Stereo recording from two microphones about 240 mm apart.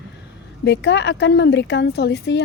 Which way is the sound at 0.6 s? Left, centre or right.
Left.